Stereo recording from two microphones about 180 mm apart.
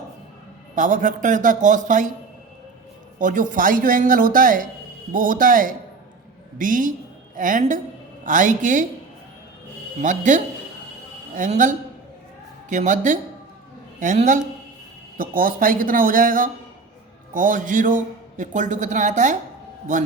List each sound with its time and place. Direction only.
0.8 s a man's voice: 45° right (ahead or behind)
3.2 s a man's voice: 45° right (ahead or behind)
10.0 s a man's voice: 45° right (ahead or behind)